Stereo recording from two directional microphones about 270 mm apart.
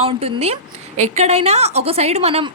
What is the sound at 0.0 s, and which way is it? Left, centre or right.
A woman's voice, right.